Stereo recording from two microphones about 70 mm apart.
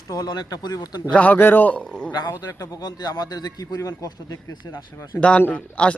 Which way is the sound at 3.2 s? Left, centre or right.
Left.